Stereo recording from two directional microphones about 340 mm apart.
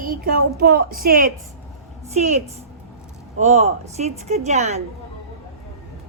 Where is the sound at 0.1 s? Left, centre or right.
Right.